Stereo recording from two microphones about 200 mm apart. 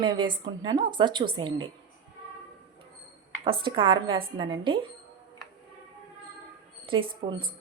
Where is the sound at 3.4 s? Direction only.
25° right (ahead or behind).